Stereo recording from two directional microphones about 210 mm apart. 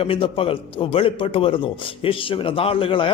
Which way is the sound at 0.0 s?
25° left (ahead or behind).